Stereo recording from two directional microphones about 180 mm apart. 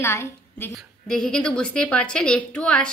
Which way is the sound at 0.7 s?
5° left (ahead or behind).